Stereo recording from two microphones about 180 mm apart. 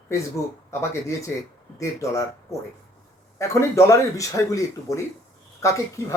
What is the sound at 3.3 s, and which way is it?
Speech, 15° left (ahead or behind).